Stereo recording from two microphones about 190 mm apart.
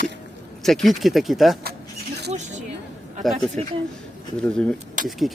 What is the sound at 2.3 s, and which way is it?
Speech, 35° right (ahead or behind).